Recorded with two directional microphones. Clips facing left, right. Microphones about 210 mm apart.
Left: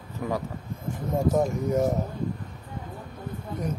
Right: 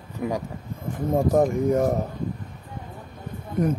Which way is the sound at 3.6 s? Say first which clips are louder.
Right 9 dB; 55° right (ahead or behind).